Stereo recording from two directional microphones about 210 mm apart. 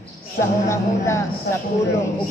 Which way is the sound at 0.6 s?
15° left (ahead or behind).